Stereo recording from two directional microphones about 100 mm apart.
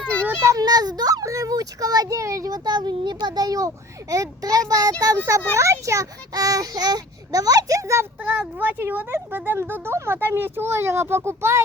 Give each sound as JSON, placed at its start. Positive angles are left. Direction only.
{"t": 0.0, "sound": "a sound", "side_deg": 10}
{"t": 0.5, "sound": "a child's voice", "side_deg": -40}
{"t": 8.2, "sound": "speech", "side_deg": -15}